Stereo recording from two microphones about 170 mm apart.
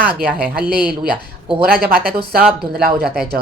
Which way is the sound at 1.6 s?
60° right (ahead or behind).